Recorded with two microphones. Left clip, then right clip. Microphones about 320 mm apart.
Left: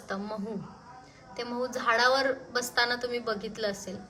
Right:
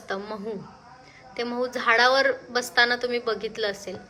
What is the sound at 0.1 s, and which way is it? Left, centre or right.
Speech, centre.